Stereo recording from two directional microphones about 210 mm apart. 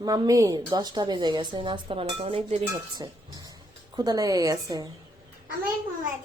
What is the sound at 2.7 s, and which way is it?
A woman's voice, 20° right (ahead or behind).